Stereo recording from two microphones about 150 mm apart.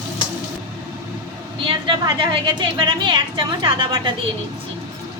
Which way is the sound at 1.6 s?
30° right (ahead or behind).